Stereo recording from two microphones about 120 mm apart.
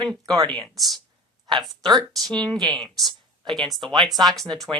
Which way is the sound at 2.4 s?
35° right (ahead or behind).